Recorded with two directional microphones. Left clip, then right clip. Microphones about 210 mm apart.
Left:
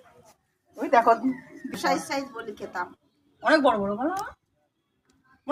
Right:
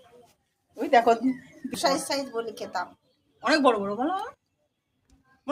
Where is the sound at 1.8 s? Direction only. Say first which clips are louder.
Right 1 dB; 55° right (ahead or behind).